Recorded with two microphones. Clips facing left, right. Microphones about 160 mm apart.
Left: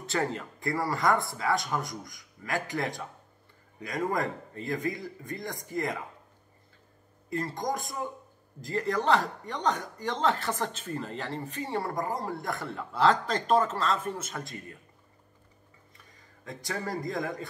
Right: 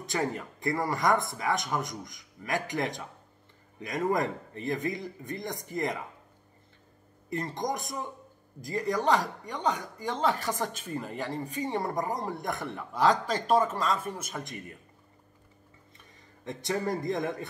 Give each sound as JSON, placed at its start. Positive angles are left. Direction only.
{"t": 0.0, "sound": "a man's voice", "side_deg": -15}
{"t": 7.2, "sound": "a man's voice", "side_deg": -20}
{"t": 16.4, "sound": "a man's voice", "side_deg": -25}